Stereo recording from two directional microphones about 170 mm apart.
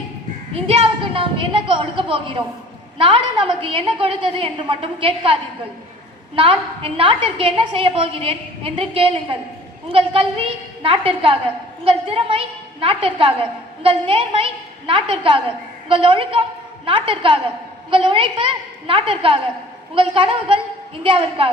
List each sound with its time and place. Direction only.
0.5 s a woman's voice: 30° right (ahead or behind)